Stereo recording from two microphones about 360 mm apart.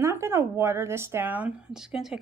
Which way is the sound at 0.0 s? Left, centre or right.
Centre.